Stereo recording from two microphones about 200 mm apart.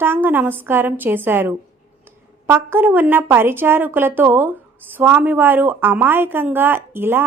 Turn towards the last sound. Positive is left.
turn(degrees=-10)  # may be behind; listen again after turning